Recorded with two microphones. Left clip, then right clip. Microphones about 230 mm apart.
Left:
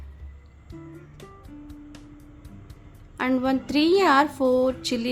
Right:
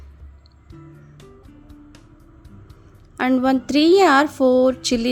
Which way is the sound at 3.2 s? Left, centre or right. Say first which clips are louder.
Right 5 dB; right.